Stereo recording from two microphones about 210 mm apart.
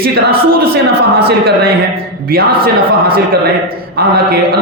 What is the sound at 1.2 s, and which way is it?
A man's voice, 50° right (ahead or behind).